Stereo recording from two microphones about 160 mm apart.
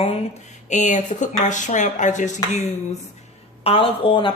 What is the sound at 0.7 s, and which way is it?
Speech, 50° left (ahead or behind).